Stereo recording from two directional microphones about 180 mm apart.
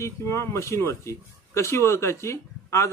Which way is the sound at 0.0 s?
15° left (ahead or behind).